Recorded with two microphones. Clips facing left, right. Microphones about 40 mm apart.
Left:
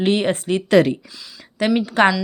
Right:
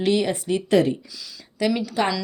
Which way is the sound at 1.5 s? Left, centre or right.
Left.